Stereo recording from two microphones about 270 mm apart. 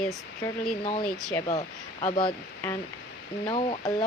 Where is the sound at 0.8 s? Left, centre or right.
Left.